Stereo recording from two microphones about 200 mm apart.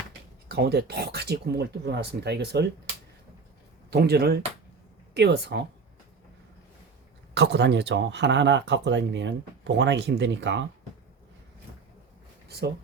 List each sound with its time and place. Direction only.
0.4 s speech: 50° right (ahead or behind)
3.8 s speech: 55° right (ahead or behind)
7.3 s speech: 60° right (ahead or behind)
12.5 s speech: 55° right (ahead or behind)